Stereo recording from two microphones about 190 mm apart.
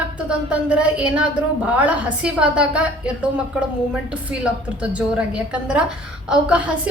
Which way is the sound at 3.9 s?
5° right (ahead or behind).